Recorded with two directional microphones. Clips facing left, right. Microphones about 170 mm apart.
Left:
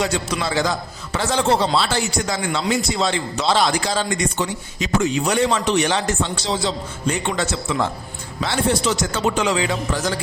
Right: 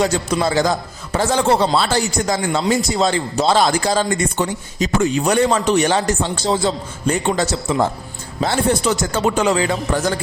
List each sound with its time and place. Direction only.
0.0 s speech: 40° right (ahead or behind)
1.3 s speech: 50° right (ahead or behind)